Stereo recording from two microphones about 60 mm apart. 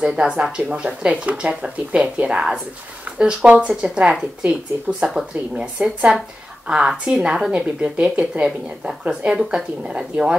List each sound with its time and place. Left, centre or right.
0.0 s speech: centre